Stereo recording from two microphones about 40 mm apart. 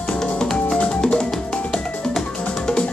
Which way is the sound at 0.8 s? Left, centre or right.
Centre.